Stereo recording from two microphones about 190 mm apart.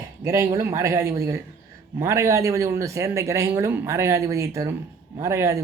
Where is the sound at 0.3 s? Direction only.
15° right (ahead or behind).